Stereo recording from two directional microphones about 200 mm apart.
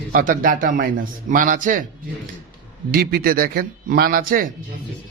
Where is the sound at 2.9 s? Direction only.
45° right (ahead or behind).